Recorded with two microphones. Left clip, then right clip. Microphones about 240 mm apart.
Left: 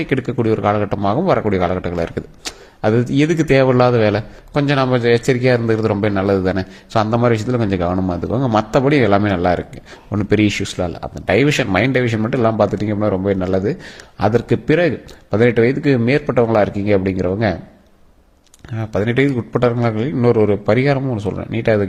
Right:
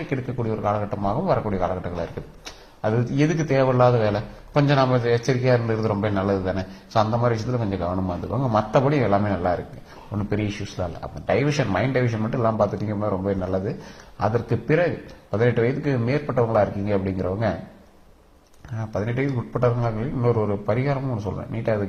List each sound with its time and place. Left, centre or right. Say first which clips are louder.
0.1 s speech: left 10 dB; left
18.8 s speech: left 9 dB; left